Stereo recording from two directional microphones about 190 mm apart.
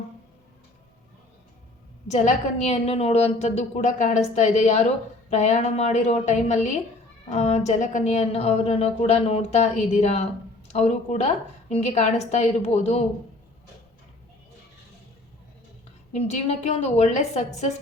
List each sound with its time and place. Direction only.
2.0 s a woman's voice: 40° left (ahead or behind)
16.1 s a woman's voice: 35° left (ahead or behind)